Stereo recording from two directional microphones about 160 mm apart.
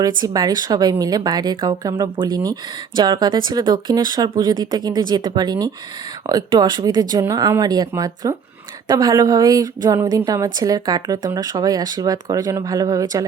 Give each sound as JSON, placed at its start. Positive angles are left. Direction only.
{"t": 0.2, "sound": "a woman's voice", "side_deg": -25}